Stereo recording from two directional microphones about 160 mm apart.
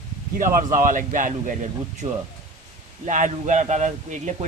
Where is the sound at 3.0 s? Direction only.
55° right (ahead or behind).